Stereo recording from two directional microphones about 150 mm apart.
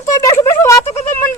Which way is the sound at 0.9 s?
50° left (ahead or behind).